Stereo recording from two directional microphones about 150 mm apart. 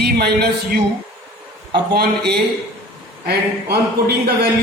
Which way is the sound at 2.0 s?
90° right.